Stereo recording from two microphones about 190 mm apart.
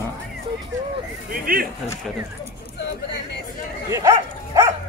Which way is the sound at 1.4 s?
50° right (ahead or behind).